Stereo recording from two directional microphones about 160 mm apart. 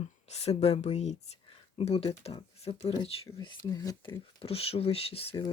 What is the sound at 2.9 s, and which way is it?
Speech, 30° left (ahead or behind).